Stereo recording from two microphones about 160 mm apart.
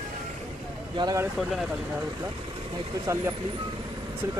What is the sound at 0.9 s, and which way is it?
Speech, 25° right (ahead or behind).